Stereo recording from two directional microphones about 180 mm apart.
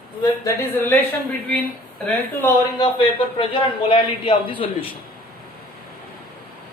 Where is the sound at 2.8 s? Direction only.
25° left (ahead or behind).